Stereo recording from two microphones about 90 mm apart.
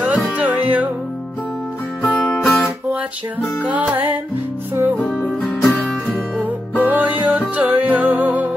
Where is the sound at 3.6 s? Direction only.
15° right (ahead or behind).